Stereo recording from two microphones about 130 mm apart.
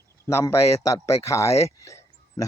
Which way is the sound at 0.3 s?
20° left (ahead or behind).